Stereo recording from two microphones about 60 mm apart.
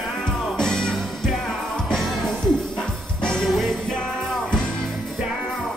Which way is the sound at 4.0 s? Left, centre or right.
Centre.